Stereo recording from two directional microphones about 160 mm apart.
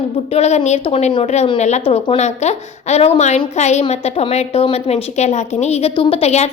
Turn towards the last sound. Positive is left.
turn(degrees=40)  # may be behind; listen again after turning